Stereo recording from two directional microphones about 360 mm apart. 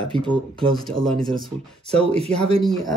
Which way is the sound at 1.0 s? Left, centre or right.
Centre.